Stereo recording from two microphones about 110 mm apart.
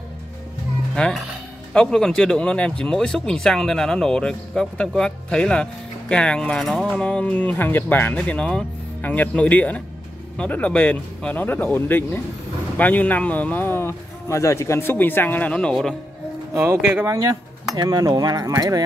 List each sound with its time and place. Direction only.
0.9 s a man's voice: 5° left (ahead or behind)
16.5 s speech: 15° right (ahead or behind)
17.0 s speech: 30° right (ahead or behind)